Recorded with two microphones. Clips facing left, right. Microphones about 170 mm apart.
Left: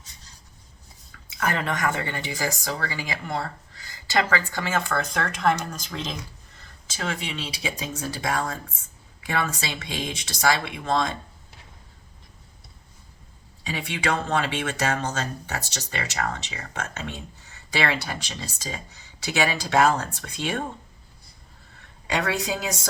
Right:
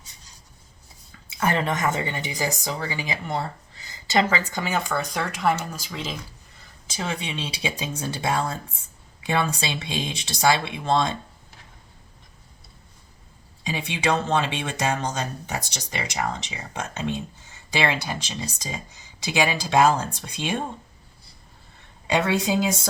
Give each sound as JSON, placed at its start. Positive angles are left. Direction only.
{"t": 1.4, "sound": "speech", "side_deg": -25}
{"t": 6.9, "sound": "speech", "side_deg": -20}
{"t": 13.7, "sound": "speech", "side_deg": -20}
{"t": 22.0, "sound": "speech", "side_deg": -25}